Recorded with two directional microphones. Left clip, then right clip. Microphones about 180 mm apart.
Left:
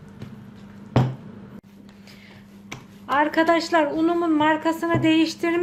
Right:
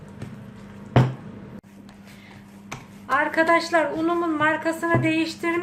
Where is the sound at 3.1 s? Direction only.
45° left (ahead or behind).